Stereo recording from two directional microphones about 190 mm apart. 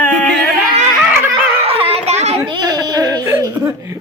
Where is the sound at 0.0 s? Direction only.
5° left (ahead or behind).